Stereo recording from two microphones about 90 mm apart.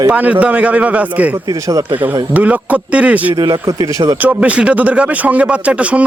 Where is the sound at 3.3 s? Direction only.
50° right (ahead or behind).